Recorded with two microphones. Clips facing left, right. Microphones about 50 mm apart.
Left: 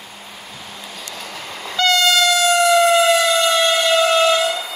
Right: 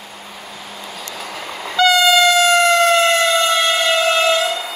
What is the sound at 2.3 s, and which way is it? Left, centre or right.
Civil defense siren, right.